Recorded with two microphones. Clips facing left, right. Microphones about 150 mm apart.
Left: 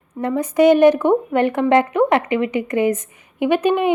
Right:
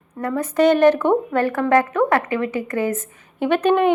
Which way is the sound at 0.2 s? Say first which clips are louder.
Left 2 dB; 20° left (ahead or behind).